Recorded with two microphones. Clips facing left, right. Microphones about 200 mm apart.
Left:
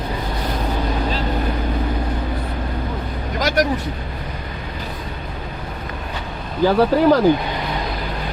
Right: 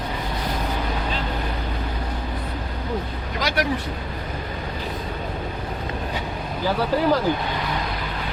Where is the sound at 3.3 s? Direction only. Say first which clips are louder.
Left 5 dB; 45° left (ahead or behind).